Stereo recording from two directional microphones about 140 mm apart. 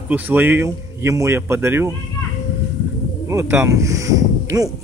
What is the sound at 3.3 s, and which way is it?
Speech, 20° right (ahead or behind).